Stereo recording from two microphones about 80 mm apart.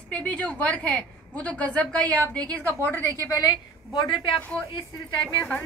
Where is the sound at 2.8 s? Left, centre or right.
Left.